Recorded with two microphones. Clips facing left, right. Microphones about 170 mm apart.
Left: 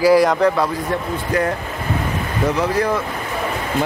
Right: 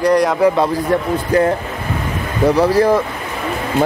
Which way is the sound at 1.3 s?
30° right (ahead or behind).